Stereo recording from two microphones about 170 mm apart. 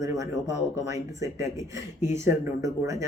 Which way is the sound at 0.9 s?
20° right (ahead or behind).